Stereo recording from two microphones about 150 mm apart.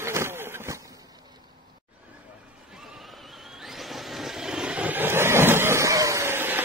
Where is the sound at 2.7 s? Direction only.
Centre (ahead or behind).